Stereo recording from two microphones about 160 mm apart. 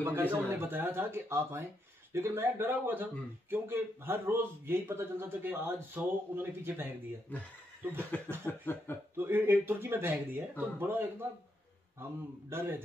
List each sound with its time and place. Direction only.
0.0 s speech: 15° right (ahead or behind)
8.1 s chuckle: 10° left (ahead or behind)
9.1 s speech: 15° right (ahead or behind)